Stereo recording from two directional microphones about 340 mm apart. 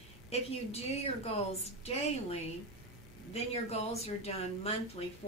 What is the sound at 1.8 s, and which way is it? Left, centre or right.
A woman's voice, centre.